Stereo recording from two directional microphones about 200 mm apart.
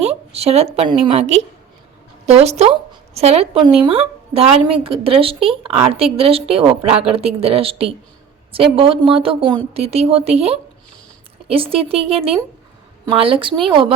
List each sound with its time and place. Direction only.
0.0 s a woman's voice: 30° right (ahead or behind)